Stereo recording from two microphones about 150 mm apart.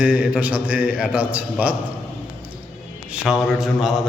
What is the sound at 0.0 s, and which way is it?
A man's voice, 5° right (ahead or behind).